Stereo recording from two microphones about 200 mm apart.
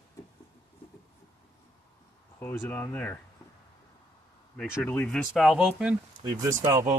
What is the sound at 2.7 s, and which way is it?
Speech, 10° left (ahead or behind).